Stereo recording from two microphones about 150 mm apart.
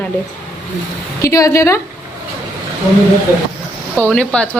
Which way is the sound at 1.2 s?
20° left (ahead or behind).